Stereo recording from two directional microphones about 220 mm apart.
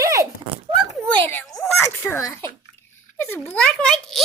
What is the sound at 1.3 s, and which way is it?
A child's voice, 10° left (ahead or behind).